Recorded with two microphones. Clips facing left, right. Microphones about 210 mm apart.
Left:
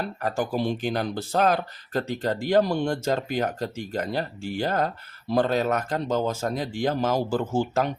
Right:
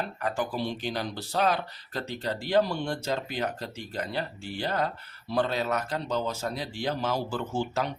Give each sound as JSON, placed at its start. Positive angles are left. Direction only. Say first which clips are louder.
{"t": 0.0, "sound": "speech", "louder": "left 3 dB", "side_deg": 40}